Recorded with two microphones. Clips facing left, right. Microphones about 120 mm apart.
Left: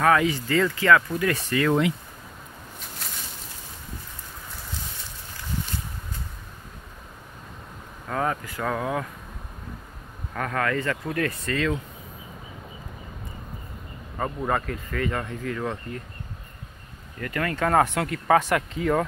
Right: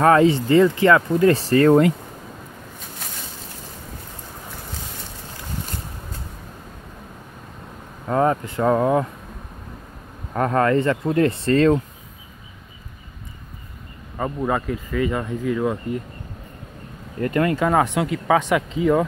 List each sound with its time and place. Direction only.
0.0 s speech: 30° right (ahead or behind)
8.1 s speech: 30° right (ahead or behind)
10.3 s speech: 30° right (ahead or behind)
14.1 s speech: 5° right (ahead or behind)
17.2 s speech: 25° right (ahead or behind)
17.6 s speech: centre (ahead or behind)